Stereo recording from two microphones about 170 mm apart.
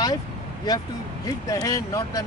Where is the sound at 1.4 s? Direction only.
20° left (ahead or behind).